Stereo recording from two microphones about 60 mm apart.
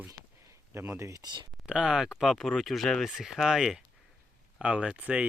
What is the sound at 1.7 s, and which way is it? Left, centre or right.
Speech, centre.